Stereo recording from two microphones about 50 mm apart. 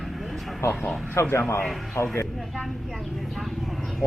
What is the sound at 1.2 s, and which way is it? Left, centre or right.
Speech, left.